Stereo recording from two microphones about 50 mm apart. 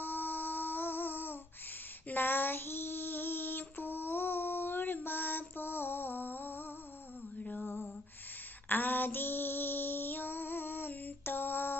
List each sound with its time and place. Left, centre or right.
0.0 s a sound: left
2.1 s female singing: left
7.3 s mantra: left
7.6 s lullaby: left
8.6 s female singing: left